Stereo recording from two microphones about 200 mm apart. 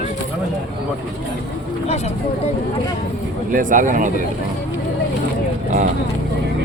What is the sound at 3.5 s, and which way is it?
Speech, 40° right (ahead or behind).